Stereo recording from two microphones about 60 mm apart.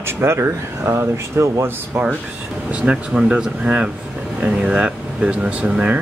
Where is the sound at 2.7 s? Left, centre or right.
Centre.